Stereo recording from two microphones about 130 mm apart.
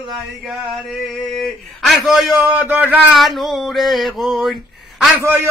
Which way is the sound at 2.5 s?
15° right (ahead or behind).